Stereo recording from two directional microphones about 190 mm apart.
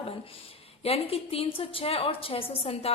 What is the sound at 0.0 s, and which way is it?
A woman's voice, 30° left (ahead or behind).